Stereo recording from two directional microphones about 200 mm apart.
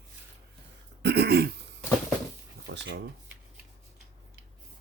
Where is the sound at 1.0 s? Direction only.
55° right (ahead or behind).